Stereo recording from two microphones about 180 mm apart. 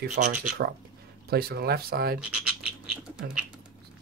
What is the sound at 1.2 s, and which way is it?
Speech, 60° right (ahead or behind).